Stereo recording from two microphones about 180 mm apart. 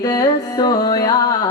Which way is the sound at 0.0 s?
20° left (ahead or behind).